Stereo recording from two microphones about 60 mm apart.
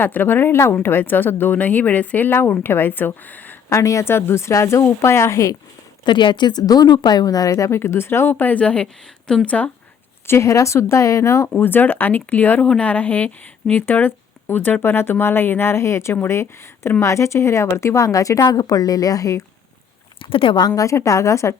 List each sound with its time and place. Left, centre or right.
0.0 s speech: left
2.3 s speech: left
3.7 s a woman's voice: left
6.6 s speech: left; by 9.6 s centre
10.4 s a woman's voice: left
11.4 s a woman's voice: left
20.6 s a woman's voice: left